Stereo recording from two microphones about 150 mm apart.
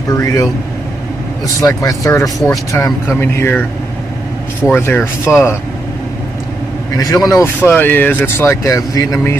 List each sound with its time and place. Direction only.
0.2 s speech: 20° left (ahead or behind)
1.6 s speech: 20° left (ahead or behind)
4.7 s speech: 15° left (ahead or behind)
7.0 s speech: 25° left (ahead or behind)
7.4 s speech: 15° left (ahead or behind)